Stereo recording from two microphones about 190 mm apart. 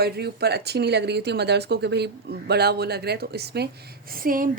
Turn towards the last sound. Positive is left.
turn(degrees=-45)  # may be behind; listen again after turning